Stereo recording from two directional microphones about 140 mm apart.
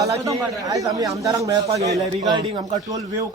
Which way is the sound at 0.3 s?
25° right (ahead or behind).